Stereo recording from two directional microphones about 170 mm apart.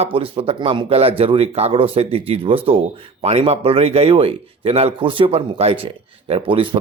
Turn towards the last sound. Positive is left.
turn(degrees=-30)  # may be behind; listen again after turning